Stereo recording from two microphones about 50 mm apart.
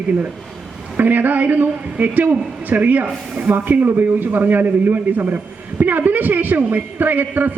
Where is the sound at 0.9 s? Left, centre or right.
Right.